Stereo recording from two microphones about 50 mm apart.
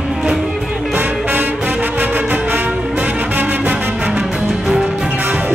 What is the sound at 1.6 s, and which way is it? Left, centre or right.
Music, right.